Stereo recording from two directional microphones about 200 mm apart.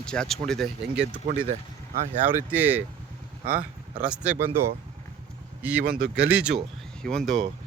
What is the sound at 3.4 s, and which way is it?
Speech, 45° right (ahead or behind).